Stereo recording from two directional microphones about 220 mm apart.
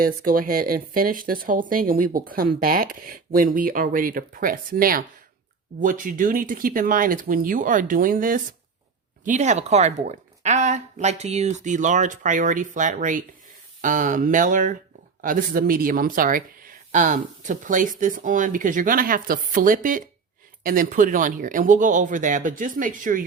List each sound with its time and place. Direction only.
0.0 s speech: 40° right (ahead or behind)